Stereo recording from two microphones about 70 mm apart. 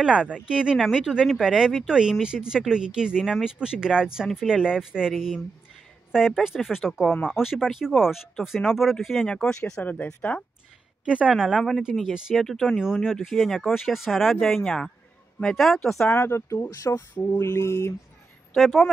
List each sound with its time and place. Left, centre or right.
0.0 s speech: centre
9.2 s speech: centre
11.1 s speech: centre
11.4 s speech: centre
16.1 s speech: left
17.1 s speech: left
17.4 s mantra: left
18.6 s speech: centre